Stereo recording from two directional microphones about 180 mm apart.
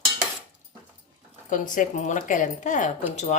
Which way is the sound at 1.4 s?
45° left (ahead or behind).